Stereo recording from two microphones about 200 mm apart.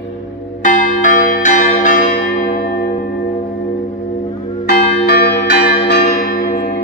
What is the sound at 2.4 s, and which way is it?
Church bell, 45° left (ahead or behind).